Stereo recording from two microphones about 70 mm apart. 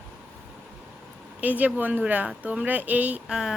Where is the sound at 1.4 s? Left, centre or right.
Right.